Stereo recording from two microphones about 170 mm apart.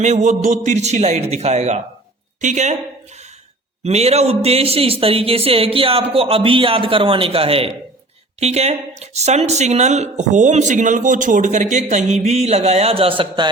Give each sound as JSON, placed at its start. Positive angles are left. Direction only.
{"t": 0.0, "sound": "speech", "side_deg": -45}
{"t": 3.8, "sound": "speech", "side_deg": -40}